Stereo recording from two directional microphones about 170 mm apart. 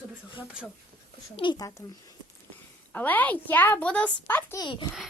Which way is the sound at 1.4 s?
25° left (ahead or behind).